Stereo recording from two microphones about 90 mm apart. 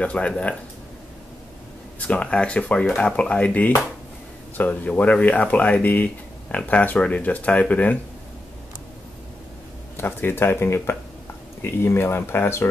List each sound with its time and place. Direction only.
0.0 s speech: 15° left (ahead or behind)
2.0 s speech: 15° left (ahead or behind)
9.9 s speech: 25° left (ahead or behind)